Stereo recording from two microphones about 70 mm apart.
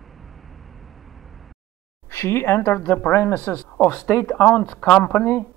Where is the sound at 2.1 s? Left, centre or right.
Left.